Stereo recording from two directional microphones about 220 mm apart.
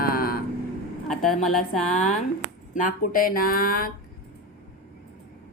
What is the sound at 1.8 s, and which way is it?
Speech, 35° left (ahead or behind).